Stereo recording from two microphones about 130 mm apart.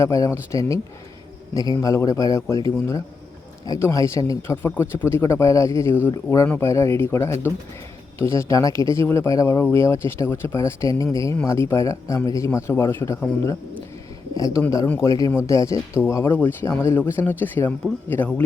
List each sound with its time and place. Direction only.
0.0 s speech: 25° left (ahead or behind)
3.7 s speech: 20° left (ahead or behind)
8.4 s speech: 25° left (ahead or behind)